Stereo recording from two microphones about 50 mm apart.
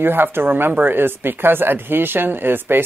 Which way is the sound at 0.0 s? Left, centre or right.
Right.